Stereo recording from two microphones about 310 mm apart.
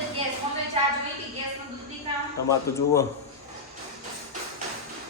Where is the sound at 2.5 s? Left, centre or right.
Centre.